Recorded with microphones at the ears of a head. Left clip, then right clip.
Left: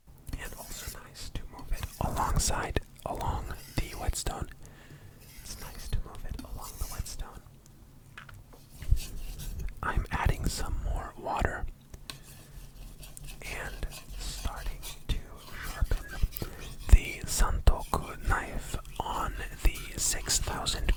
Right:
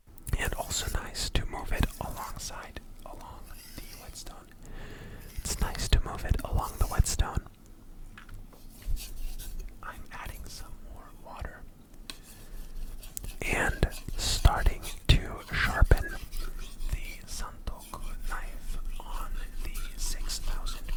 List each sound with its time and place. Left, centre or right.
0.3 s whispering: right
2.0 s whispering: left
5.4 s whispering: right
9.8 s whispering: left
13.4 s whispering: right
16.4 s whispering: left